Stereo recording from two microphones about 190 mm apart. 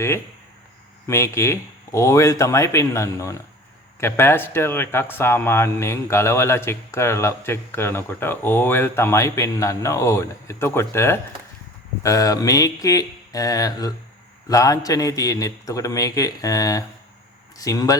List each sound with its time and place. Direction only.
1.0 s speech: 15° left (ahead or behind)
12.0 s mantra: 15° left (ahead or behind)
14.5 s speech: 20° left (ahead or behind)
17.6 s mantra: 20° left (ahead or behind)